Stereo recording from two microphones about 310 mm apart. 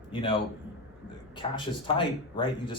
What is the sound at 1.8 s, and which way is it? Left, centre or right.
Speech, centre.